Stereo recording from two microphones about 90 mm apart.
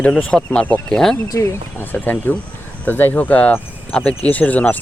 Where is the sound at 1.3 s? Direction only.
35° left (ahead or behind).